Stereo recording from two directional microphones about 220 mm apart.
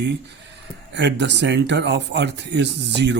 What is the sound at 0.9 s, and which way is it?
Speech, 50° right (ahead or behind).